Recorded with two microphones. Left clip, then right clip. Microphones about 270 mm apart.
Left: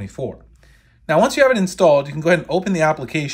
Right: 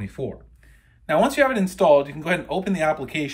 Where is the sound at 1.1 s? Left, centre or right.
Centre.